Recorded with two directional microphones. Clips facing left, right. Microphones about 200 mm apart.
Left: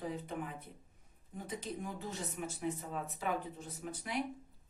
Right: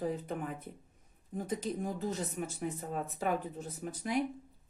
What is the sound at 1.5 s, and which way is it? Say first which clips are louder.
Speech: right 3 dB; 40° right (ahead or behind).